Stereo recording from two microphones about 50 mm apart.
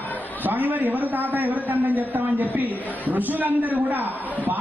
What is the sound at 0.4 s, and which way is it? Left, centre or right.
A man's voice, right.